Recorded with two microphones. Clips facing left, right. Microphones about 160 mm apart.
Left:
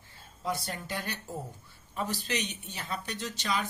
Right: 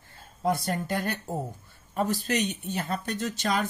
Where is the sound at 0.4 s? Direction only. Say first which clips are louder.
Right 8 dB; 50° right (ahead or behind).